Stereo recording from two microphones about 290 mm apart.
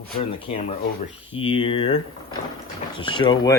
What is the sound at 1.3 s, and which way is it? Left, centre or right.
Speech, centre.